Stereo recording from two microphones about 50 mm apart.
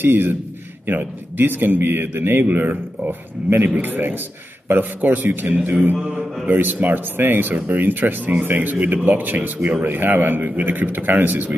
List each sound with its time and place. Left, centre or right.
0.0 s a man's voice: right